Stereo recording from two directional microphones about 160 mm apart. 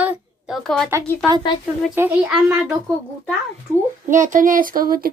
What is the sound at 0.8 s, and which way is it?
A child's voice, 15° right (ahead or behind).